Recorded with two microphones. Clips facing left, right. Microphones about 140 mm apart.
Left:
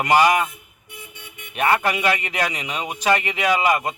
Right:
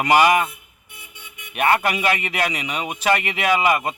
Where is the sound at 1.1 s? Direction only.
55° left (ahead or behind).